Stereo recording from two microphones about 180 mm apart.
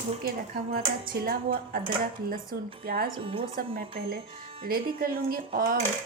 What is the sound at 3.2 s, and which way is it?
Speech, 30° right (ahead or behind).